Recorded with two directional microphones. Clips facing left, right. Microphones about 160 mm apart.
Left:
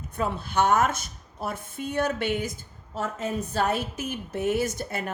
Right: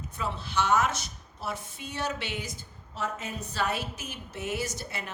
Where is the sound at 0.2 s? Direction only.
50° left (ahead or behind).